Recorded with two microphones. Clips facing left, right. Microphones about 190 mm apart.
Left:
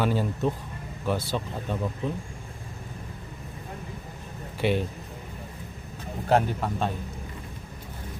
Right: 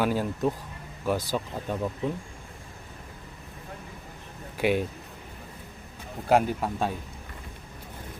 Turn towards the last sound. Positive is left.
turn(degrees=-10)  # may be behind; listen again after turning